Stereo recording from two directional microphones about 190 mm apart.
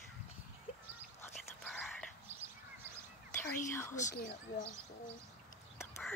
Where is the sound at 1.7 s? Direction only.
Centre (ahead or behind).